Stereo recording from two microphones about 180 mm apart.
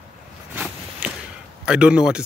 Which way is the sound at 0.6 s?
10° right (ahead or behind).